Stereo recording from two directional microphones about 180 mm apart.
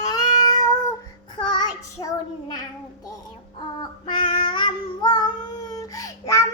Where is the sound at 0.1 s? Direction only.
20° left (ahead or behind).